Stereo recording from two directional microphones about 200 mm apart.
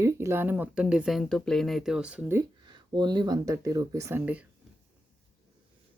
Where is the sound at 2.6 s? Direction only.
20° right (ahead or behind).